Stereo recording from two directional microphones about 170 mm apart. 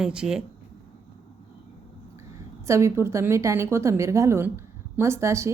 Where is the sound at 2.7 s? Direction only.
15° right (ahead or behind).